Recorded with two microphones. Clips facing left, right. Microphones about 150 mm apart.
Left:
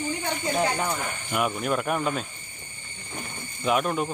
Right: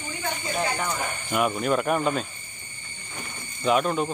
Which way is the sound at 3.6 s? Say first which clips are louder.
Right 2 dB; 5° left (ahead or behind).